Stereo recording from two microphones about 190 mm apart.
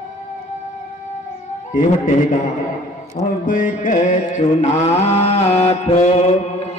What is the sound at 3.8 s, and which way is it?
Mantra, 40° left (ahead or behind).